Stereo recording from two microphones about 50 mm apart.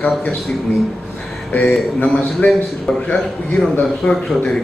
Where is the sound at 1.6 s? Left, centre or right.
Left.